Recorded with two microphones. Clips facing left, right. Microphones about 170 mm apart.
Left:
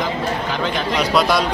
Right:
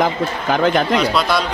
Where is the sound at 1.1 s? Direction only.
15° left (ahead or behind).